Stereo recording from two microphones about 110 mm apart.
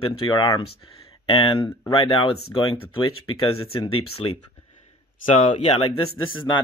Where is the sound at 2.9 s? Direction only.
55° left (ahead or behind).